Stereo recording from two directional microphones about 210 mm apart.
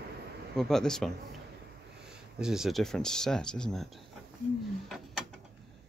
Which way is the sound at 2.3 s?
5° right (ahead or behind).